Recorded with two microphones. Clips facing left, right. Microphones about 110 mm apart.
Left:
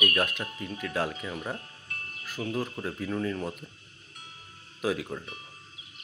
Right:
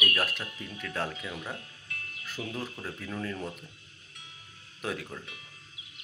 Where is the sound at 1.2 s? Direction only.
35° left (ahead or behind).